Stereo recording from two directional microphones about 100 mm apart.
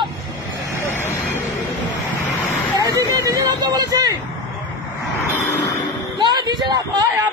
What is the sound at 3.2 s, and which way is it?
Vehicle, 35° right (ahead or behind).